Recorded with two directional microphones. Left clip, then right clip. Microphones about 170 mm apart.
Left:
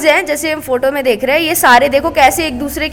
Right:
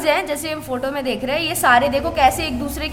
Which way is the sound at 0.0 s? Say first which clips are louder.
Left 7 dB; 35° left (ahead or behind).